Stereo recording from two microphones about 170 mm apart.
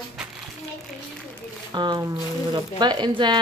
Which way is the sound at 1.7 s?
25° right (ahead or behind).